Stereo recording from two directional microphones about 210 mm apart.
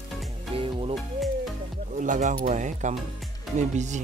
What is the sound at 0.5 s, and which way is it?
Music, 25° right (ahead or behind).